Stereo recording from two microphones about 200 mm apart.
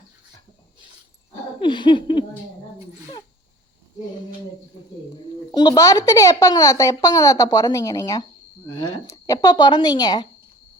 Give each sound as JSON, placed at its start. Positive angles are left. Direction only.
{"t": 1.6, "sound": "laughter", "side_deg": 25}
{"t": 5.5, "sound": "speech", "side_deg": 20}